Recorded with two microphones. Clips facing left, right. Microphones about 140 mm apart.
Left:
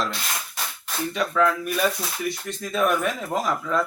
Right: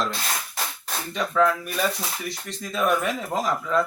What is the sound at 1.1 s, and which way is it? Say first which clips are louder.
Speech: right 1 dB; centre (ahead or behind).